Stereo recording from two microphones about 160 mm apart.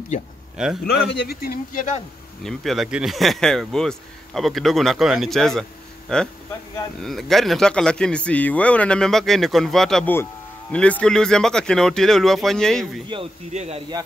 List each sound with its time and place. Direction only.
0.6 s speech: 5° right (ahead or behind)
1.1 s speech: 80° left
1.7 s speech: 60° left (ahead or behind)
2.4 s speech: centre (ahead or behind)
13.1 s speech: 40° right (ahead or behind)